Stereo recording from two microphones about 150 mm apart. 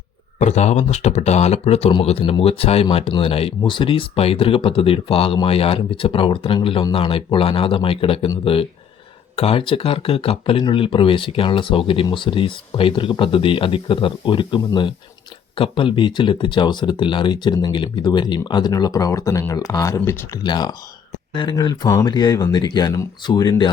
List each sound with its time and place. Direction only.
0.3 s speech: 50° left (ahead or behind)
9.3 s speech: 40° left (ahead or behind)